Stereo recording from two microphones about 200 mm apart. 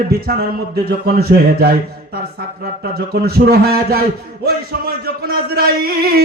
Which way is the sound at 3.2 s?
50° right (ahead or behind).